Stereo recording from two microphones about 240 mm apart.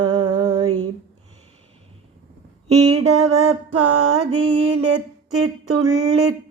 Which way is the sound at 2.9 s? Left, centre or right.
Right.